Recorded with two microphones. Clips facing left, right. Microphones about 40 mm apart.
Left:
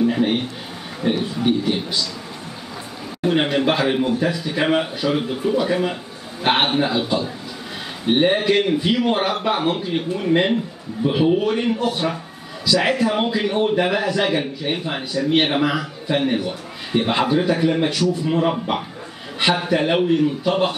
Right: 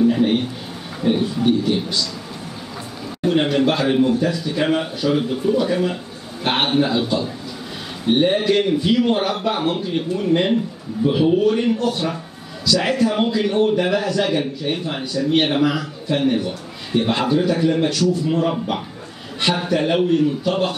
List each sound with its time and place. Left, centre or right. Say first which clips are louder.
0.0 s a sound: right 2 dB; centre
1.2 s a man's voice: right 2 dB; centre
3.2 s a man's voice: right 1 dB; centre